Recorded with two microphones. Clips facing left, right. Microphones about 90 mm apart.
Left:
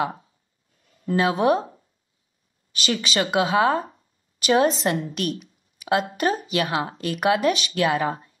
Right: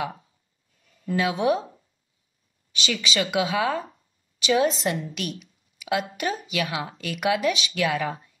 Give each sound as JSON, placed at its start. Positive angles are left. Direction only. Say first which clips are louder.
{"t": 0.8, "sound": "a woman's voice", "louder": "left 3 dB", "side_deg": 40}